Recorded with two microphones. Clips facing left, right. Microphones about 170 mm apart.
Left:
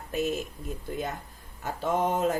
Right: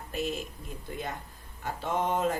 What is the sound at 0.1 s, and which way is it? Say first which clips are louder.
Speech: left 4 dB; 50° left (ahead or behind).